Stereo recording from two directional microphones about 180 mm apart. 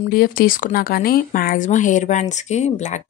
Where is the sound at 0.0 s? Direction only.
55° left (ahead or behind).